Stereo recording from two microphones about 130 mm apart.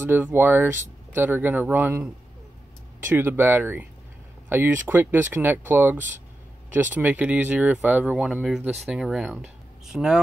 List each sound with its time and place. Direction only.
0.0 s speech: 15° right (ahead or behind)
3.1 s speech: 15° right (ahead or behind)